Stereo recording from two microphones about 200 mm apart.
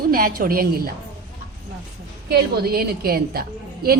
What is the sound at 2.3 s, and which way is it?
A woman's voice, 50° right (ahead or behind).